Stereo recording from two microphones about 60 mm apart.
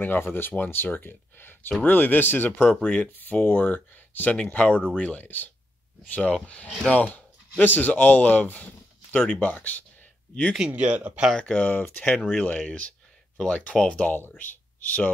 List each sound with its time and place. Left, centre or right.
0.0 s speech: left
2.8 s speech: left
3.1 s speech: left
10.7 s speech: right
11.3 s speech: centre